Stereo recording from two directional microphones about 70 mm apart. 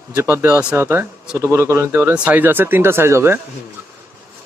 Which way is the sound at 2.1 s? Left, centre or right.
Right.